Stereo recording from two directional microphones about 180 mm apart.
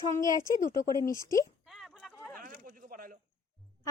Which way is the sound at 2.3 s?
50° right (ahead or behind).